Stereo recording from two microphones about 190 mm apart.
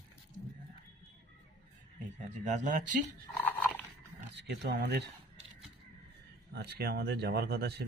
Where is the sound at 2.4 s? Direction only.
40° right (ahead or behind).